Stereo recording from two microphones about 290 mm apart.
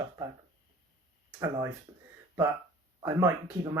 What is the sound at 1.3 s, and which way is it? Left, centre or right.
Speech, centre.